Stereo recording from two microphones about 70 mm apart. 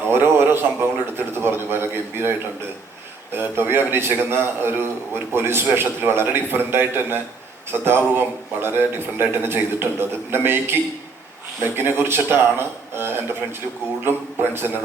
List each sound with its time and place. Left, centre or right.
0.1 s a man's voice: right
3.3 s a man's voice: right